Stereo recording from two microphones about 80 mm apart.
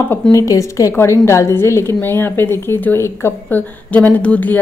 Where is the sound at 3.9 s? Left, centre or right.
Centre.